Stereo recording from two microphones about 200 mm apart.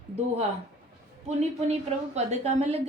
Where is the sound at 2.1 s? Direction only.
35° right (ahead or behind).